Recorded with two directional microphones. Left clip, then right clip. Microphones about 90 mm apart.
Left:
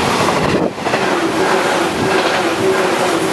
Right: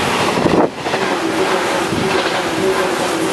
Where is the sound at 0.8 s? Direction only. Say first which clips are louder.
Left 2 dB; 25° left (ahead or behind).